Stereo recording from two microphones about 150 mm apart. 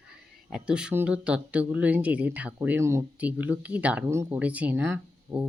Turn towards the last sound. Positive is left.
turn(degrees=-10)  # may be behind; listen again after turning